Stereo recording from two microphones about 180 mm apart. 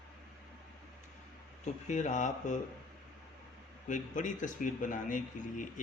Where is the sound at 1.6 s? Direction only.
40° left (ahead or behind).